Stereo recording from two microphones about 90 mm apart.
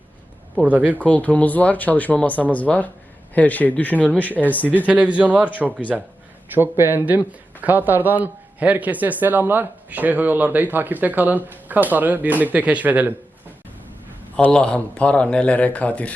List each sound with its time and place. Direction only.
0.5 s speech: 15° right (ahead or behind)
0.9 s speech: 15° left (ahead or behind)
4.9 s speech: 15° right (ahead or behind)
5.9 s speech: centre (ahead or behind)
6.5 s speech: 25° right (ahead or behind)
14.5 s speech: 10° left (ahead or behind)